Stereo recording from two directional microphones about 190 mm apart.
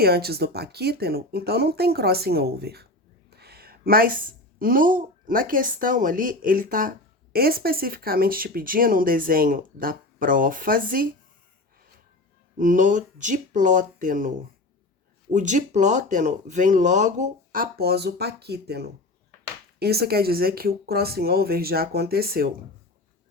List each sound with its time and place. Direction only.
0.0 s a woman's voice: 55° right (ahead or behind)
12.5 s speech: 45° right (ahead or behind)